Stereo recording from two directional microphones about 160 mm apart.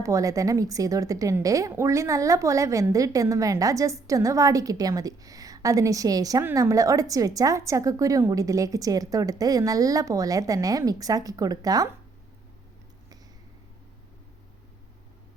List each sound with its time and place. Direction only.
0.0 s a woman's voice: 20° right (ahead or behind)